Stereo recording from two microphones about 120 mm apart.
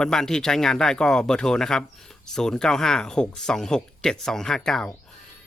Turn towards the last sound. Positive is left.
turn(degrees=5)  # may be behind; listen again after turning